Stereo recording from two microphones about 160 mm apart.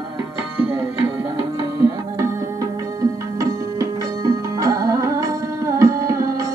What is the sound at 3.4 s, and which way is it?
Music, 20° right (ahead or behind).